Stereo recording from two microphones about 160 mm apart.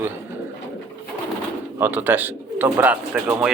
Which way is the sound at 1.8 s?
10° right (ahead or behind).